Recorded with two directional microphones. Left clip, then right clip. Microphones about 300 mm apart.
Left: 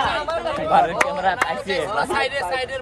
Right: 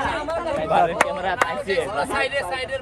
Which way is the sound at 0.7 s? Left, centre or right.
Left.